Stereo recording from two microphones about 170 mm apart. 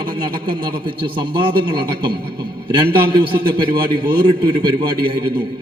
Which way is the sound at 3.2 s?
30° right (ahead or behind).